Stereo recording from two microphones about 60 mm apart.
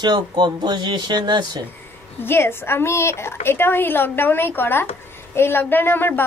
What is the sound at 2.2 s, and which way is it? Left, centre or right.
A woman's voice, left.